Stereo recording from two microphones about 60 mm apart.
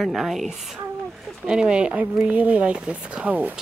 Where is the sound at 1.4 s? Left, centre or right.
Centre.